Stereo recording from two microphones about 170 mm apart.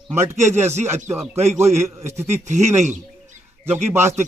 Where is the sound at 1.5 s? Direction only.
40° right (ahead or behind).